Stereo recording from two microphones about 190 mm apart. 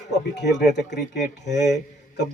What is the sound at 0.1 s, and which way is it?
A man's voice, 65° left (ahead or behind).